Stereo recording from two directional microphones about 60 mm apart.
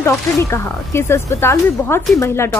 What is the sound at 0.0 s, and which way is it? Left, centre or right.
Speech, left.